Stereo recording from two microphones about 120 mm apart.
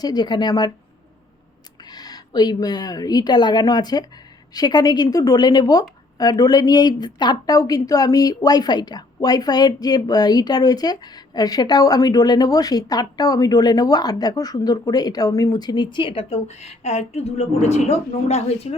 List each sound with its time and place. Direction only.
0.0 s speech: 35° left (ahead or behind)
1.9 s speech: 35° left (ahead or behind); by 18.7 s 60° left (ahead or behind)